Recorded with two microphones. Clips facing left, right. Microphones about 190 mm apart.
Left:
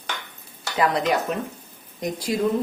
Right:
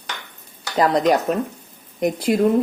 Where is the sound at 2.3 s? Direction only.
65° right (ahead or behind).